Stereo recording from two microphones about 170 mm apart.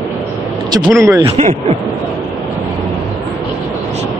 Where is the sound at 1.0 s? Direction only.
20° right (ahead or behind).